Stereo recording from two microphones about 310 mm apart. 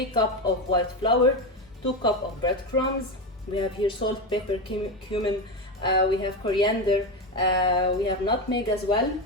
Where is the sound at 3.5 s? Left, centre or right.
Centre.